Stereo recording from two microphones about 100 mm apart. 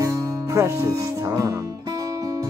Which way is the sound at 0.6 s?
30° right (ahead or behind).